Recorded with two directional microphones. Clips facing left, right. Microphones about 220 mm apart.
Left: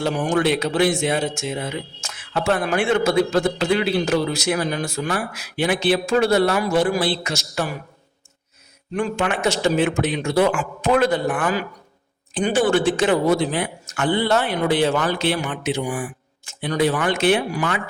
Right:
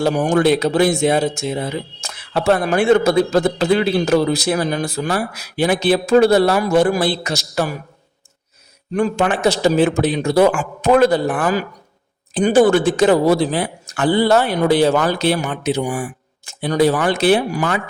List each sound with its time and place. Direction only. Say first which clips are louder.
0.0 s speech: right 5 dB; 40° right (ahead or behind)
9.0 s speech: right 5 dB; 35° right (ahead or behind)